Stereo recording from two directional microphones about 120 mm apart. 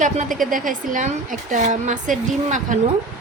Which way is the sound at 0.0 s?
90° right.